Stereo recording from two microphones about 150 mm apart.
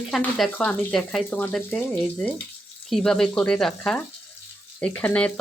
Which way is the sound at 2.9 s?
5° left (ahead or behind).